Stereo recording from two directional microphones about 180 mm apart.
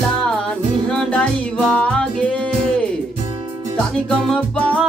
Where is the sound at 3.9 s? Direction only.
5° left (ahead or behind).